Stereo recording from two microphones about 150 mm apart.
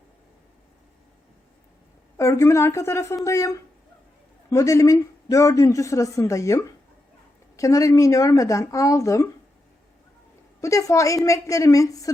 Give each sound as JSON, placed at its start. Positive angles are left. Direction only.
{"t": 2.1, "sound": "a man's voice", "side_deg": 20}
{"t": 10.6, "sound": "a man's voice", "side_deg": 20}